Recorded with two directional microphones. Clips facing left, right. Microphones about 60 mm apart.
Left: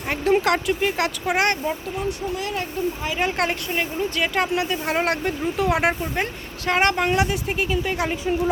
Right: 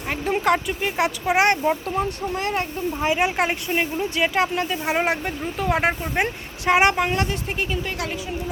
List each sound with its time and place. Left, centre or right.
0.1 s speech: centre
2.0 s speech: right
3.2 s a woman's voice: centre
4.4 s speech: centre
6.7 s a woman's voice: centre
7.2 s speech: centre